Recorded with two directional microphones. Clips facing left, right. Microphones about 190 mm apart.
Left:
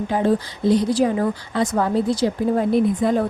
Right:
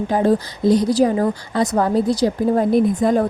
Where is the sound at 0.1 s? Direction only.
40° right (ahead or behind).